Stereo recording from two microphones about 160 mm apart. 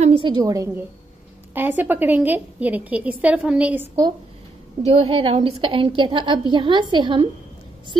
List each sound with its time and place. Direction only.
0.0 s a woman's voice: 35° right (ahead or behind); by 4.0 s 10° right (ahead or behind)
4.8 s a woman's voice: 35° right (ahead or behind)